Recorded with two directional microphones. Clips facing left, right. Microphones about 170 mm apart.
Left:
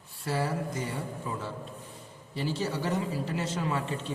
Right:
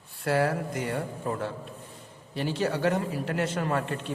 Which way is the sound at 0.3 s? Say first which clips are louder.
Right 5 dB; 65° right (ahead or behind).